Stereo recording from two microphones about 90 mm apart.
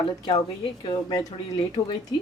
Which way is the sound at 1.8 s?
55° left (ahead or behind).